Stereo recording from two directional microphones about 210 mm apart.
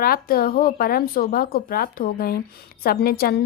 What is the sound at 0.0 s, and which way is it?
A woman's voice, 45° left (ahead or behind).